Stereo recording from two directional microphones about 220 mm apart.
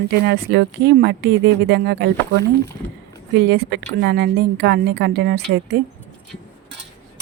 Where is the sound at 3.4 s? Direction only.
50° right (ahead or behind).